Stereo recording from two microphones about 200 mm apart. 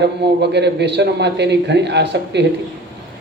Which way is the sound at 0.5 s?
60° right (ahead or behind).